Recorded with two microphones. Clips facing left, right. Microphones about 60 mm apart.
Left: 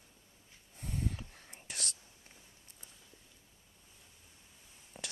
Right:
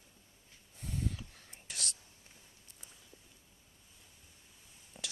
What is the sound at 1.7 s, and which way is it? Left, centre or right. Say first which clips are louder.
Whispering: even; left.